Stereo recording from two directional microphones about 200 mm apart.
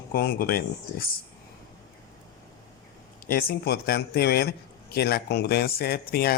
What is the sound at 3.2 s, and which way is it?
Speech, 50° left (ahead or behind).